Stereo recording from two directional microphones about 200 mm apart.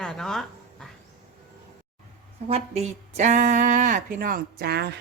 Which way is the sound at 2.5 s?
35° right (ahead or behind).